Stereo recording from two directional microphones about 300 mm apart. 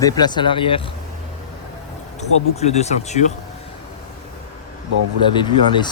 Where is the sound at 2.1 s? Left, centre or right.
Left.